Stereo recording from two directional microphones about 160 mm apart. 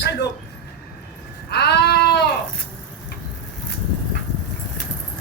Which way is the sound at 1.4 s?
90° left.